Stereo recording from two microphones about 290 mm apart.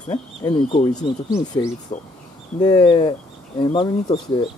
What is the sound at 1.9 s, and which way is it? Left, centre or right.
Speech, left.